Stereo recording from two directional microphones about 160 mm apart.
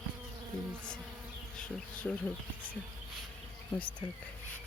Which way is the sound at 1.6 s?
5° left (ahead or behind).